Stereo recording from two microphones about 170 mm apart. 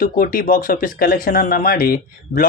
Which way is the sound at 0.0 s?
55° left (ahead or behind).